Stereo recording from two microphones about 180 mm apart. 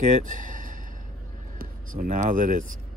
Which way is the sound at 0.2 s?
45° right (ahead or behind).